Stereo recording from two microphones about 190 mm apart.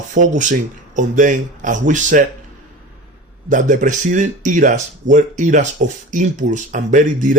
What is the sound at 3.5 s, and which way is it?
Speech, 40° right (ahead or behind).